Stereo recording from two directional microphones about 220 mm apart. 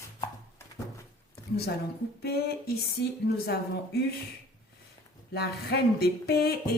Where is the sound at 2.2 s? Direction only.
45° left (ahead or behind).